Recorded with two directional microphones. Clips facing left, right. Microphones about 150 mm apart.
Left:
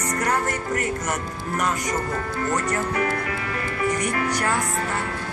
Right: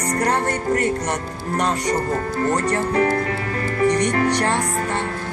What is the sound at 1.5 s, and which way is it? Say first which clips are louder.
Speech: right 4 dB; 35° right (ahead or behind).